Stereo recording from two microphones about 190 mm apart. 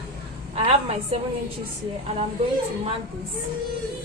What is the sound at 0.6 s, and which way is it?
Speech, 30° right (ahead or behind).